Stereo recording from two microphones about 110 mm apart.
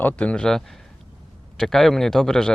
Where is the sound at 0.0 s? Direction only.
10° left (ahead or behind).